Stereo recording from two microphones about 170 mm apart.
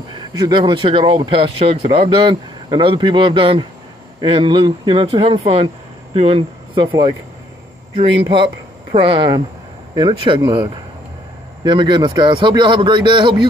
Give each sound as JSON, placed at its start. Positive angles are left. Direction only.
{"t": 0.1, "sound": "speech", "side_deg": -25}
{"t": 7.9, "sound": "a man's voice", "side_deg": -30}